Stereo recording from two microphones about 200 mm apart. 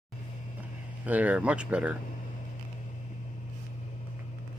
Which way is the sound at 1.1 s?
5° right (ahead or behind).